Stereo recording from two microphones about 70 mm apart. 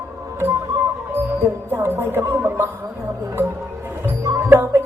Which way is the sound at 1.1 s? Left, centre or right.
Right.